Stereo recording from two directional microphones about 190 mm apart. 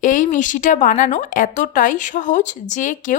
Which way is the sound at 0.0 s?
40° left (ahead or behind).